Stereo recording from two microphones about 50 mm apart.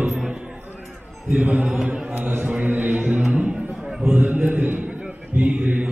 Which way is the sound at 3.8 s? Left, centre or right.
Centre.